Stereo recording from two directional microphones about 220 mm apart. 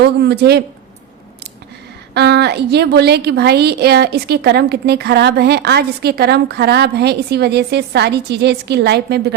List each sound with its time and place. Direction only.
0.0 s a woman's voice: 50° right (ahead or behind)
2.1 s a woman's voice: 50° right (ahead or behind)